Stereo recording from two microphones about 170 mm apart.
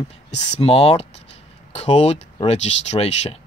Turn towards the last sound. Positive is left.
turn(degrees=35)  # may be behind; listen again after turning